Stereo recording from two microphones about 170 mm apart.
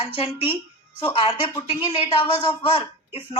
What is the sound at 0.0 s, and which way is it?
A woman's voice, 35° left (ahead or behind).